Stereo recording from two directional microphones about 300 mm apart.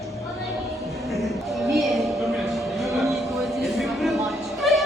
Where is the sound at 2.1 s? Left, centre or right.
Centre.